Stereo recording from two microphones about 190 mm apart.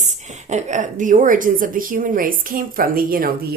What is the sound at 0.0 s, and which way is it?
A woman's voice, 40° right (ahead or behind).